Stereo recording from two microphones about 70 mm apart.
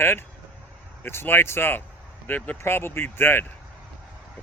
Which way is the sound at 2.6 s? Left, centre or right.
Left.